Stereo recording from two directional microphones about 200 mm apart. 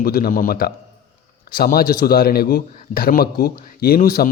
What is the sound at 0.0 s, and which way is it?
A man's voice, 50° left (ahead or behind).